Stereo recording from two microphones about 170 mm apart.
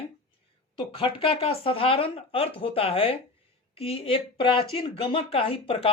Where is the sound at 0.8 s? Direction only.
30° left (ahead or behind).